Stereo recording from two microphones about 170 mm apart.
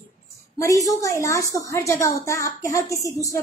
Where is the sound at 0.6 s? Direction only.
20° left (ahead or behind).